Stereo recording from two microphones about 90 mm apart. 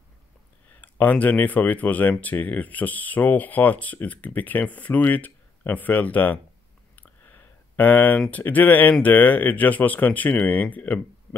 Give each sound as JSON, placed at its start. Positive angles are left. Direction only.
{"t": 0.7, "sound": "speech", "side_deg": 20}
{"t": 7.0, "sound": "a sound", "side_deg": 20}
{"t": 8.3, "sound": "speech", "side_deg": 20}